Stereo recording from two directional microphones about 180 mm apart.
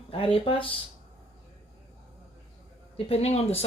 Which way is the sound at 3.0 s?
35° left (ahead or behind).